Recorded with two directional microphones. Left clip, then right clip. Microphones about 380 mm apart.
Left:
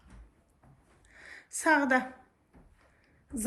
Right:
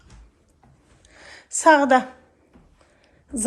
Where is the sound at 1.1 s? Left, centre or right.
Centre.